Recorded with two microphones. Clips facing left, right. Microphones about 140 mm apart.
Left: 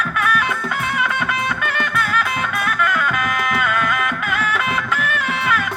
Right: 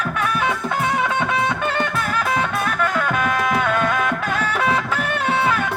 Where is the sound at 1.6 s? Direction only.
30° right (ahead or behind).